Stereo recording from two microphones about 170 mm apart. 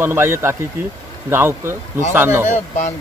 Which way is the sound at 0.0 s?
15° right (ahead or behind).